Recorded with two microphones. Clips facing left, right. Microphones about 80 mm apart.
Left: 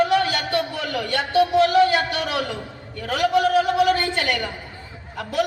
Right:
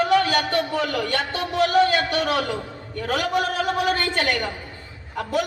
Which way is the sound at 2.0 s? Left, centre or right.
Right.